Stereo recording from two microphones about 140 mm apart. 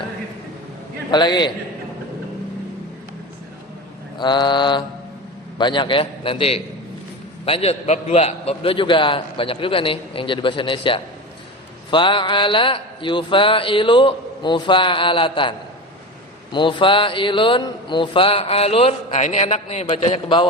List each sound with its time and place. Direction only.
1.1 s a man's voice: 30° left (ahead or behind)
4.2 s a man's voice: 30° left (ahead or behind)